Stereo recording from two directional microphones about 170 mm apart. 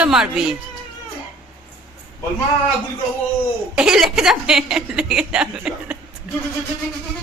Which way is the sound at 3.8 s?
5° right (ahead or behind).